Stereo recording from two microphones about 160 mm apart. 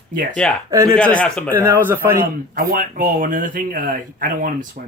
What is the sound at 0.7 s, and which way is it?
Speech, 20° right (ahead or behind).